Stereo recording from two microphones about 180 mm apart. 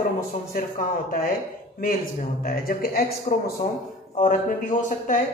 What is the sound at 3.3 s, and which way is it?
Speech, 45° left (ahead or behind).